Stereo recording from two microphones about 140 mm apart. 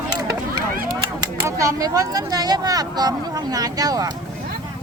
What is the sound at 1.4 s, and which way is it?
Speech, 20° right (ahead or behind).